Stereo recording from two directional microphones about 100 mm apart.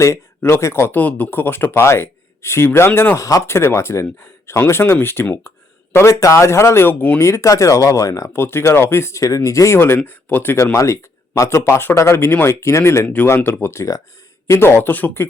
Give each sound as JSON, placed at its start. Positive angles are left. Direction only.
{"t": 0.0, "sound": "speech", "side_deg": 30}
{"t": 14.8, "sound": "speech", "side_deg": 20}